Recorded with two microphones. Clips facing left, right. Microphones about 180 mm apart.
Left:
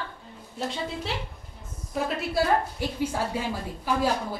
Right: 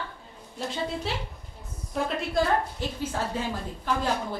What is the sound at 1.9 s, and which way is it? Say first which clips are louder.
A woman's voice: even; 5° left (ahead or behind).